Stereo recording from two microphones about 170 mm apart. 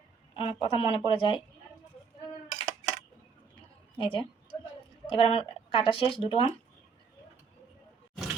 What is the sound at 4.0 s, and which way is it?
Speech, 30° left (ahead or behind).